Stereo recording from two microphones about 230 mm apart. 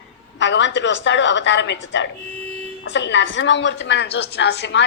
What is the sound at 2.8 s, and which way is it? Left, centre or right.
A woman's voice, left.